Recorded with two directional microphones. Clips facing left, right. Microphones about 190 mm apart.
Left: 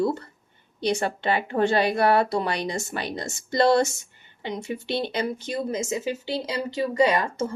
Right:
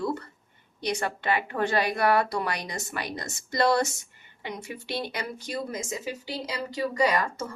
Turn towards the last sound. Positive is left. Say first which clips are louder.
# left 4 dB
turn(degrees=25)  # may be behind; listen again after turning